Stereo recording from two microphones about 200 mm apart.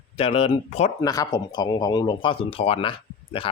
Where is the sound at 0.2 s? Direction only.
30° left (ahead or behind).